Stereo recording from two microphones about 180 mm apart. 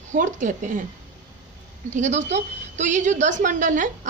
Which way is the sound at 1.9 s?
40° right (ahead or behind).